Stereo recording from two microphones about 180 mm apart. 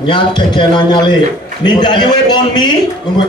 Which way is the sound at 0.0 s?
25° left (ahead or behind).